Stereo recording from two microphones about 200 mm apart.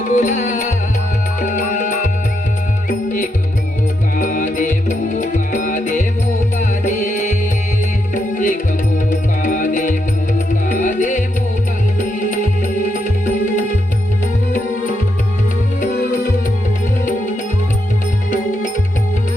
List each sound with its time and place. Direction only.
0.1 s music: 40° left (ahead or behind)
4.2 s music: 40° left (ahead or behind)
15.8 s music: 40° left (ahead or behind)